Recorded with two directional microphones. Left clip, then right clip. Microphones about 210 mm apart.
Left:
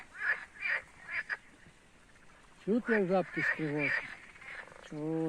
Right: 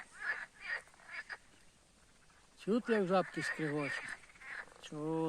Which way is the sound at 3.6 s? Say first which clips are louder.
Left 3 dB; 35° right (ahead or behind).